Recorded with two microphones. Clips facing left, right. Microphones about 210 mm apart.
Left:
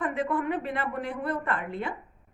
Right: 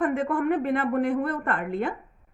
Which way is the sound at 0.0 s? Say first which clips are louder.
Right 4 dB; 50° right (ahead or behind).